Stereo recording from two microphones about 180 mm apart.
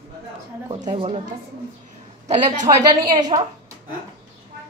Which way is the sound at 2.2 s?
40° right (ahead or behind).